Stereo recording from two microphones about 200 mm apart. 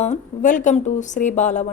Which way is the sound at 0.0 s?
40° left (ahead or behind).